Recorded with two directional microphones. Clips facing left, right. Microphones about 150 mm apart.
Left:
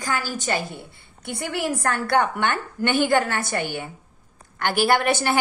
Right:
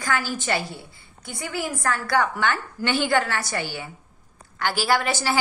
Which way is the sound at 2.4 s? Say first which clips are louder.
Left 1 dB; 50° left (ahead or behind).